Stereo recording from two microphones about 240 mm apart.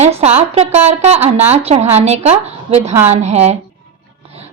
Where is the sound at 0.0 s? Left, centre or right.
Right.